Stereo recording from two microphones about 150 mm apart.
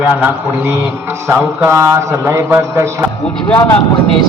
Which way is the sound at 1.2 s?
15° right (ahead or behind).